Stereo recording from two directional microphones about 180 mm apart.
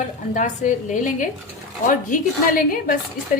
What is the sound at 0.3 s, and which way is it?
A woman's voice, 45° left (ahead or behind).